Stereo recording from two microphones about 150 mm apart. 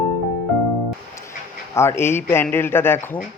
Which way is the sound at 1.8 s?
15° left (ahead or behind).